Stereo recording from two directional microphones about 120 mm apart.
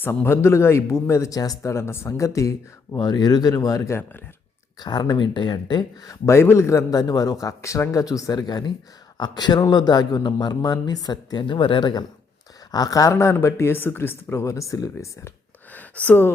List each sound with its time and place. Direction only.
0.0 s speech: 20° left (ahead or behind)
4.8 s speech: 35° left (ahead or behind)
15.7 s a sound: 15° left (ahead or behind)